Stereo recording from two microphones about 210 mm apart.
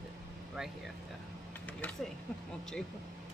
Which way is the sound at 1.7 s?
5° left (ahead or behind).